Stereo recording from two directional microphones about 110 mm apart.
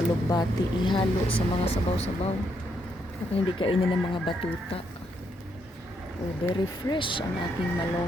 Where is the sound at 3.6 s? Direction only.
50° left (ahead or behind).